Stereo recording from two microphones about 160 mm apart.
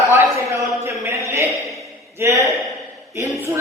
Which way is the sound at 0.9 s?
15° right (ahead or behind).